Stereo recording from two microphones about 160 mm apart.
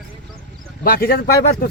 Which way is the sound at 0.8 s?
70° left (ahead or behind).